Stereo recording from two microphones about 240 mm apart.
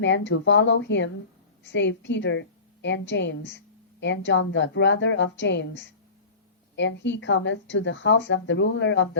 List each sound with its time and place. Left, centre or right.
0.0 s a woman's voice: left